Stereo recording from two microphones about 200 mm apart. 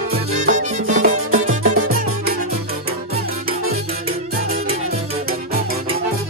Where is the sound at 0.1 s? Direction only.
40° right (ahead or behind).